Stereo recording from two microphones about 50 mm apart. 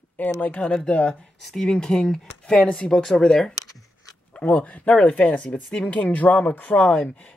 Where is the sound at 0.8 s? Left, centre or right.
Left.